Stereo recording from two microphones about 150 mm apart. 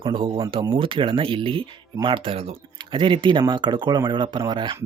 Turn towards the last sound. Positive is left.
turn(degrees=-30)  # may be behind; listen again after turning